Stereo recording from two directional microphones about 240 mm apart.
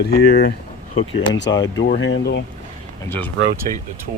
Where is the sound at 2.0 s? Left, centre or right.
Left.